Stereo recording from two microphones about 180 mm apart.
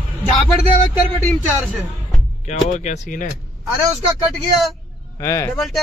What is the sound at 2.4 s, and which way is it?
Speech, 40° left (ahead or behind).